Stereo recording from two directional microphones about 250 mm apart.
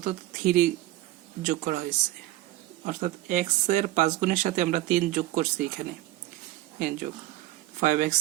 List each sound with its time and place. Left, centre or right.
0.0 s speech: right
2.8 s speech: right